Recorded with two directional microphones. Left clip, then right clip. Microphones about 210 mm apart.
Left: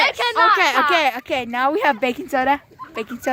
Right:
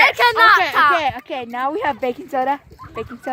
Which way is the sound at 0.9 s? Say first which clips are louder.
Even; 30° left (ahead or behind).